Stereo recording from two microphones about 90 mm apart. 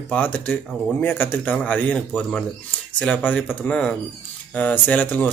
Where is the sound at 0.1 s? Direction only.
20° left (ahead or behind).